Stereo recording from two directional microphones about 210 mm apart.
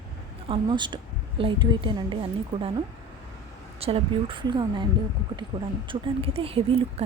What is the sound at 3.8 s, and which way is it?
A woman's voice, 30° right (ahead or behind).